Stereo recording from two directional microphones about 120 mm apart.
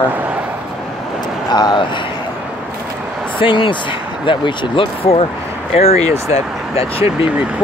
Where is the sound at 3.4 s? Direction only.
45° left (ahead or behind).